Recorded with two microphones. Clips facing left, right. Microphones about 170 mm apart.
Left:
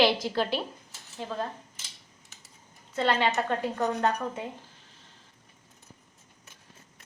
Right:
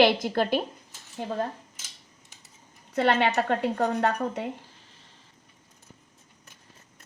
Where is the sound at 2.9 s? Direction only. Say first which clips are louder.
Right 3 dB; 60° right (ahead or behind).